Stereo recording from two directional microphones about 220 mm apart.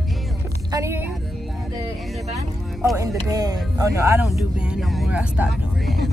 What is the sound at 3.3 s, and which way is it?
Speech, 15° right (ahead or behind).